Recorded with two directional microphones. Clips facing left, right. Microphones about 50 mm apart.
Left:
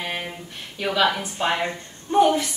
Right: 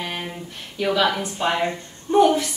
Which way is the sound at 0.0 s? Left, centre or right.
Centre.